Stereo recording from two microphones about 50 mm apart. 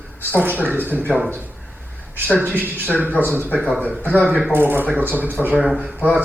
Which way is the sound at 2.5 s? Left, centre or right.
Right.